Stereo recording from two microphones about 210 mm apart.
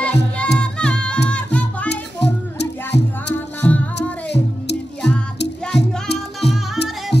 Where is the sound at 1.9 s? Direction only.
55° left (ahead or behind).